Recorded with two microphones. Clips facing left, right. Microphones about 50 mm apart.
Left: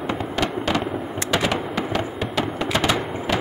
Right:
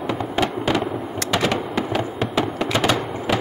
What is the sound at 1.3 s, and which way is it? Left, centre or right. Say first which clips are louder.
Fireworks: right 1 dB; centre.